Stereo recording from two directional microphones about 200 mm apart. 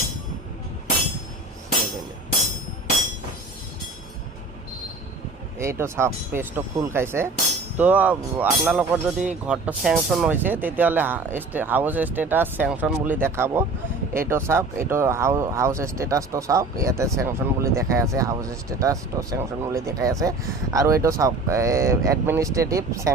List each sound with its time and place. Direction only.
5.5 s speech: 15° right (ahead or behind)